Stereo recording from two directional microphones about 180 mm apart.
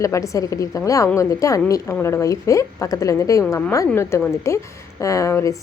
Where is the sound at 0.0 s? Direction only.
15° left (ahead or behind).